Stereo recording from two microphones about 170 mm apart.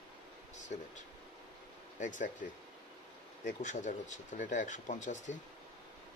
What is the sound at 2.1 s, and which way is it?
Speech, 50° left (ahead or behind).